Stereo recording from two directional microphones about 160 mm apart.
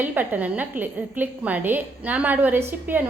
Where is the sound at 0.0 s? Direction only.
10° right (ahead or behind).